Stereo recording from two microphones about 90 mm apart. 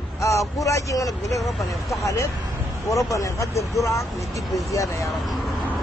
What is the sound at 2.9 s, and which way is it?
Speech, 35° left (ahead or behind).